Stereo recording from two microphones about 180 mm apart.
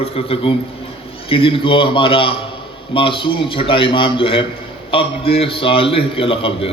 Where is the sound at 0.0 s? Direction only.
30° left (ahead or behind).